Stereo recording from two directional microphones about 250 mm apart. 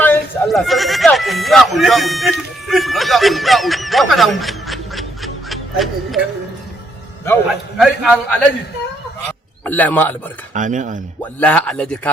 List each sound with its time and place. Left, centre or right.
0.0 s sheep: centre
7.4 s a man's voice: centre
9.6 s a man's voice: centre
10.5 s speech: right
11.3 s a man's voice: centre